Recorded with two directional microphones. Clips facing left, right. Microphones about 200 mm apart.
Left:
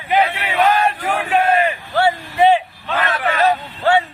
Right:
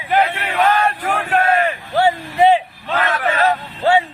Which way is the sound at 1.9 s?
20° right (ahead or behind).